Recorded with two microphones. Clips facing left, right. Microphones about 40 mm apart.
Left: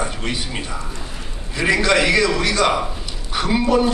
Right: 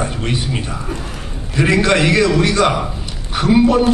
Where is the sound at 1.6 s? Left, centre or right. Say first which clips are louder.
Right 3 dB; centre.